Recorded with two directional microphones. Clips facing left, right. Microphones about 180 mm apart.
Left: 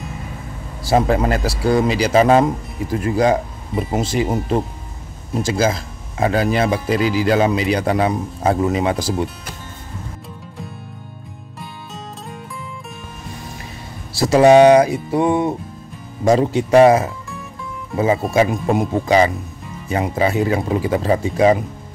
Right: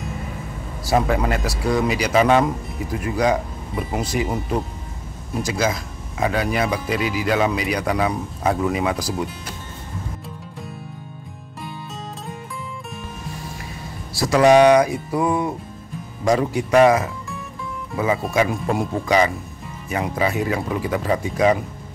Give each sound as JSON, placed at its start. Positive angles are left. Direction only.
{"t": 0.8, "sound": "speech", "side_deg": 30}
{"t": 14.1, "sound": "speech", "side_deg": 25}